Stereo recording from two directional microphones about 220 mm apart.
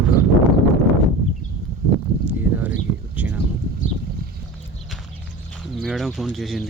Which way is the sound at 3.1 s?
5° right (ahead or behind).